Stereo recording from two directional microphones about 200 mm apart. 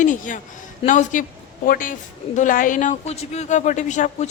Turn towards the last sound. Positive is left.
turn(degrees=35)  # may be behind; listen again after turning